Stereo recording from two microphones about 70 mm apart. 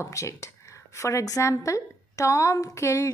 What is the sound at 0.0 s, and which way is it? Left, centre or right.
Speech, left.